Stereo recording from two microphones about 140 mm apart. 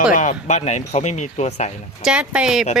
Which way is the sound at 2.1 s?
5° right (ahead or behind).